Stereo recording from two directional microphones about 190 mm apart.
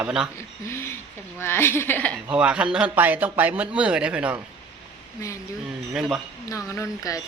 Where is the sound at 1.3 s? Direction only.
10° left (ahead or behind).